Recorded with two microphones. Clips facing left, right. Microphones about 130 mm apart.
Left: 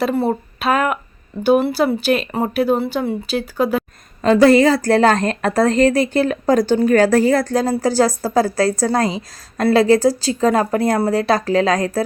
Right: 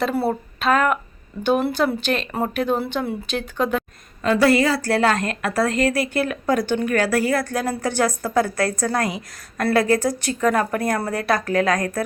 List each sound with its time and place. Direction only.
0.0 s speech: centre (ahead or behind)
4.4 s a woman's voice: 40° left (ahead or behind)